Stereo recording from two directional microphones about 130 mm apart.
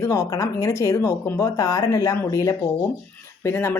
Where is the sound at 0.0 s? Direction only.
25° left (ahead or behind).